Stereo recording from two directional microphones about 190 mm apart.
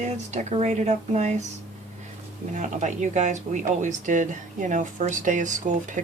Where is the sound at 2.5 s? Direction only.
40° right (ahead or behind).